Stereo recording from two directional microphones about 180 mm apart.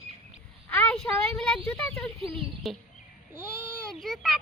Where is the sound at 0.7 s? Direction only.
5° left (ahead or behind).